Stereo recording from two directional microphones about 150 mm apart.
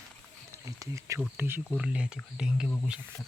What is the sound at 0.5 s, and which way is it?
Speech, 20° right (ahead or behind).